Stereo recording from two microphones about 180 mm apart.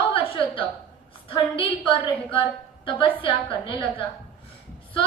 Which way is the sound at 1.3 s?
30° left (ahead or behind).